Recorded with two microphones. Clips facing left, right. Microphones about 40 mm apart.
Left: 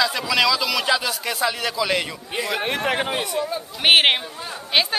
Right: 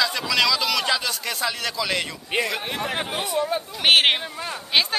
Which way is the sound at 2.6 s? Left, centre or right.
Left.